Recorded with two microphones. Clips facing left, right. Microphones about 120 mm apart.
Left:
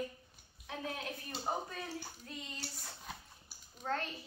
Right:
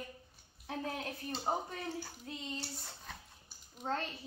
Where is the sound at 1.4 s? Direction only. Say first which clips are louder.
Right 2 dB; 20° right (ahead or behind).